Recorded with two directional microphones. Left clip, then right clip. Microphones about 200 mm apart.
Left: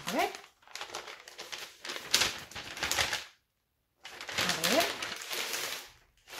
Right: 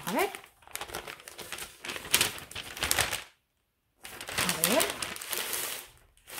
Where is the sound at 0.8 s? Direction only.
25° right (ahead or behind).